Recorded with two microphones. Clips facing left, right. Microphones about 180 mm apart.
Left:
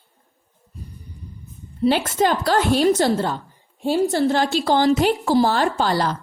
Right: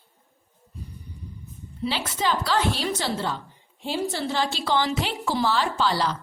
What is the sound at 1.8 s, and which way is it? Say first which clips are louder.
A woman's voice: left 9 dB; 50° left (ahead or behind).